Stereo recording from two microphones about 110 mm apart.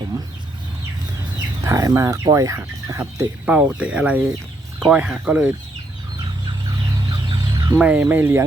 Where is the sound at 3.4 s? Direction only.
15° right (ahead or behind).